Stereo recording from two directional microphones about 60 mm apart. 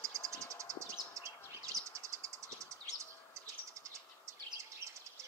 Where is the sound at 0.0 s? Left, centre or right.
Right.